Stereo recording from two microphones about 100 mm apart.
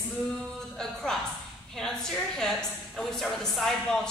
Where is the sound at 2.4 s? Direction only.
5° left (ahead or behind).